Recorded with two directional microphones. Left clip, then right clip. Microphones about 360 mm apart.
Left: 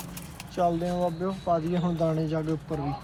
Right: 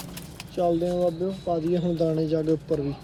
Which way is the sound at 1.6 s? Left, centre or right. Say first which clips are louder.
Right 3 dB; centre.